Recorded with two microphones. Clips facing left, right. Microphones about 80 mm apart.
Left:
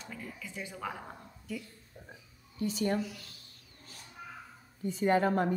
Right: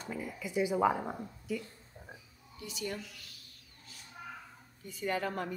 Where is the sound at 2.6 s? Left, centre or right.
Left.